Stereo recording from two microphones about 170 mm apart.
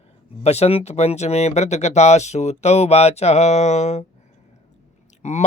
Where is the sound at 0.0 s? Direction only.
40° left (ahead or behind).